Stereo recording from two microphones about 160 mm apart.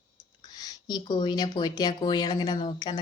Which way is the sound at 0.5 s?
25° left (ahead or behind).